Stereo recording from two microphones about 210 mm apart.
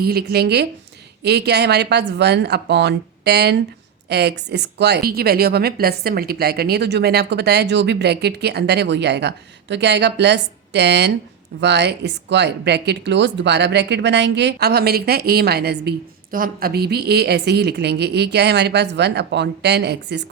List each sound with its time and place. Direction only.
0.0 s speech: 50° right (ahead or behind)